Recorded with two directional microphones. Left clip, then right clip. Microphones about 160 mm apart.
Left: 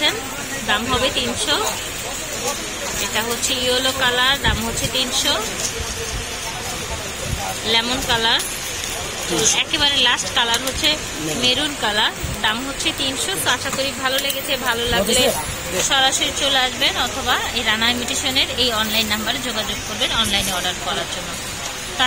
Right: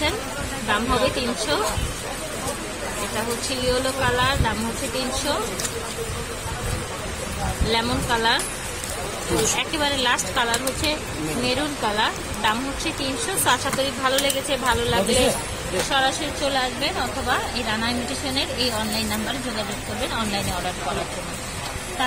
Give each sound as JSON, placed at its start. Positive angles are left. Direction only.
{"t": 0.7, "sound": "speech", "side_deg": 0}
{"t": 3.4, "sound": "speech", "side_deg": 0}
{"t": 7.7, "sound": "a woman's voice", "side_deg": -10}
{"t": 9.6, "sound": "a woman's voice", "side_deg": -10}
{"t": 13.5, "sound": "a woman's voice", "side_deg": -15}
{"t": 15.9, "sound": "speech", "side_deg": 0}